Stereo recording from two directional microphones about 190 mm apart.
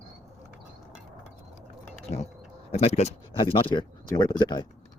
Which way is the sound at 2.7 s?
35° left (ahead or behind).